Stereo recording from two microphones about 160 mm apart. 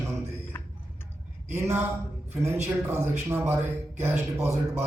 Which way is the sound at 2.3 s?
15° right (ahead or behind).